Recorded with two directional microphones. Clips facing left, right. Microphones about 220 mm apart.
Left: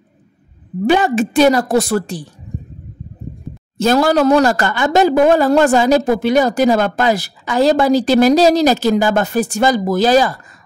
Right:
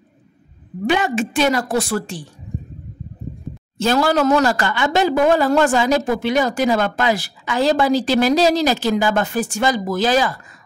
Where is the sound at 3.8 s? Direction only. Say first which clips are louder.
Left 4 dB; 40° left (ahead or behind).